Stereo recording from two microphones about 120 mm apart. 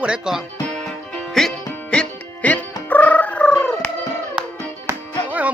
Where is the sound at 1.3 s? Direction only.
5° left (ahead or behind).